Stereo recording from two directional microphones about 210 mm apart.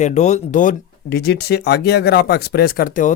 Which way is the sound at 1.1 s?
50° left (ahead or behind).